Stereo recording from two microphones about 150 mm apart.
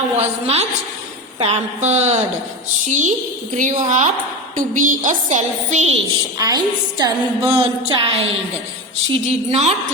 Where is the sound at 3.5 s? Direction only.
60° right (ahead or behind).